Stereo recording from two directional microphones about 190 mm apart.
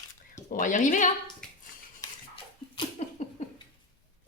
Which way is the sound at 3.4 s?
35° left (ahead or behind).